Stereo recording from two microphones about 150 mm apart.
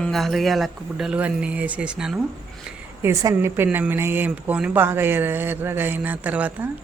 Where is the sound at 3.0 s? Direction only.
15° right (ahead or behind).